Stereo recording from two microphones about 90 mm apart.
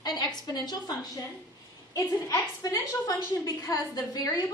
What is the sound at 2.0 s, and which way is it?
A woman's voice, 40° left (ahead or behind).